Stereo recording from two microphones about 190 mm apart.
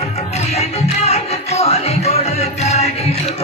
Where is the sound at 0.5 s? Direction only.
35° left (ahead or behind).